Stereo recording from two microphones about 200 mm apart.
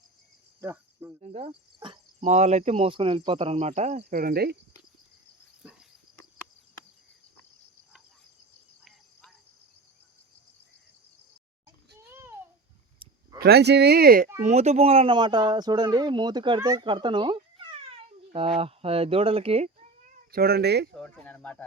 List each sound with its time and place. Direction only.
0.6 s cricket: 15° right (ahead or behind)
1.2 s speech: 35° right (ahead or behind); by 4.5 s 50° right (ahead or behind)
12.1 s a sound: 10° right (ahead or behind)
13.0 s a sound: 25° right (ahead or behind)
13.4 s speech: 55° right (ahead or behind)
14.4 s speech: 35° right (ahead or behind); by 20.9 s 55° right (ahead or behind)
20.9 s speech: 5° left (ahead or behind)